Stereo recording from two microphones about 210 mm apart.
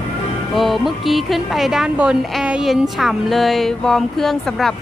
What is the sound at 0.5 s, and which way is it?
A woman's voice, centre (ahead or behind).